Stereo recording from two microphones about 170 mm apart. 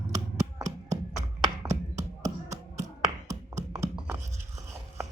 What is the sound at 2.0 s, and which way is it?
Tap, 20° right (ahead or behind).